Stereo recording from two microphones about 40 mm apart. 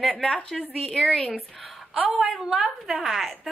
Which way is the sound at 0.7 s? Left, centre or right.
Centre.